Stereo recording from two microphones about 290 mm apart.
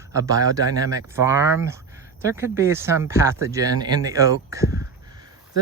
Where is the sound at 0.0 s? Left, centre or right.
Centre.